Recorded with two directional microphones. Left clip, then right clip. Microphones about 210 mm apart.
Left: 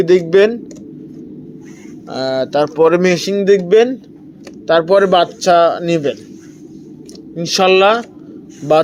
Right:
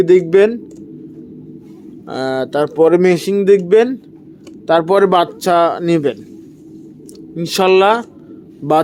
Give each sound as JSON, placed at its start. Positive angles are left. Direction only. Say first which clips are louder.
{"t": 0.0, "sound": "speech", "louder": "even", "side_deg": -15}
{"t": 2.0, "sound": "speech", "louder": "left 1 dB", "side_deg": -20}
{"t": 7.3, "sound": "speech", "louder": "left 1 dB", "side_deg": -20}